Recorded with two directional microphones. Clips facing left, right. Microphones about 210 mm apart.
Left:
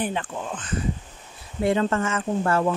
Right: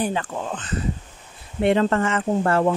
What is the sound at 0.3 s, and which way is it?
Speech, 45° right (ahead or behind).